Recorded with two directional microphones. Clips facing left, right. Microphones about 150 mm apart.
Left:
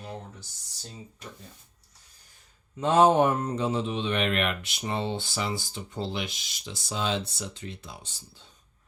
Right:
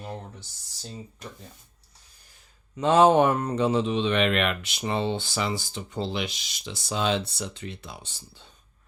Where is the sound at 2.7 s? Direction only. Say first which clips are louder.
Right 2 dB; 90° right; by 8.1 s 65° right (ahead or behind).